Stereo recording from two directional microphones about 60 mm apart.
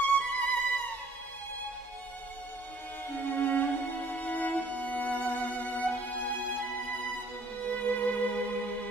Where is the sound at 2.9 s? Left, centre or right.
Left.